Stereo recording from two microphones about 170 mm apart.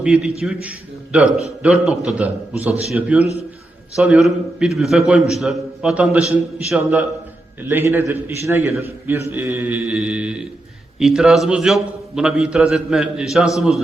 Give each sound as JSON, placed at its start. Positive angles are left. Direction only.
{"t": 0.0, "sound": "a man's voice", "side_deg": -5}